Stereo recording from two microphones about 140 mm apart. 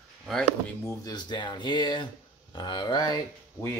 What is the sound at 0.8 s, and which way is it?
Speech, 20° left (ahead or behind).